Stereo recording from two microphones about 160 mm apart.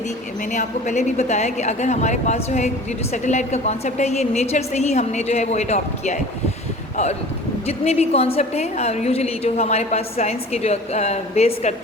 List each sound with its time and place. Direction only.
0.5 s a woman's voice: 50° left (ahead or behind)